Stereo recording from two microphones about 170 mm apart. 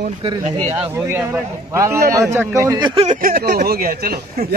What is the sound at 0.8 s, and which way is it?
A man's voice, 15° right (ahead or behind).